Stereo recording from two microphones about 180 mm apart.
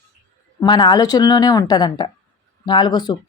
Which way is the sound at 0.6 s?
25° left (ahead or behind).